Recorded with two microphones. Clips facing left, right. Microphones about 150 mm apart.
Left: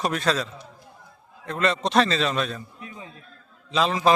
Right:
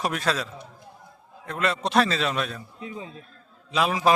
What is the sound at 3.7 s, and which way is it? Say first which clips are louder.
Speech: left 1 dB; 10° right (ahead or behind).